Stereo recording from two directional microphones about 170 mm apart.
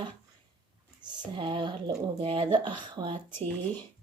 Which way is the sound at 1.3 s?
30° right (ahead or behind).